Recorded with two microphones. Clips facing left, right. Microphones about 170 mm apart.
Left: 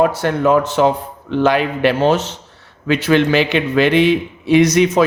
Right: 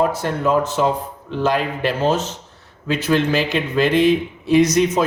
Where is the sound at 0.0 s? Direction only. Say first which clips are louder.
Left 4 dB; 75° left (ahead or behind).